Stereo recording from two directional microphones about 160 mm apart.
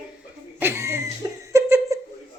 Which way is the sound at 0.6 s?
15° right (ahead or behind).